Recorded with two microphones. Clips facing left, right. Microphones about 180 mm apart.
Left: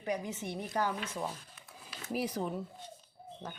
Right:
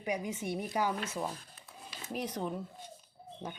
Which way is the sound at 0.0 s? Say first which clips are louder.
Right 1 dB; 10° right (ahead or behind).